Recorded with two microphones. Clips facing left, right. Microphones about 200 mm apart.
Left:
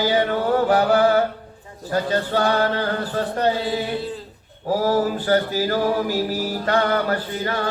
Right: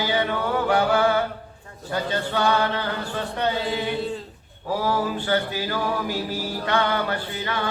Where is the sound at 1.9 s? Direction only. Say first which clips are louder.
Left 4 dB; 40° left (ahead or behind).